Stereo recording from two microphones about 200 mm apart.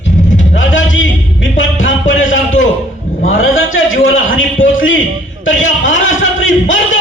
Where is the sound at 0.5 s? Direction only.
70° left (ahead or behind).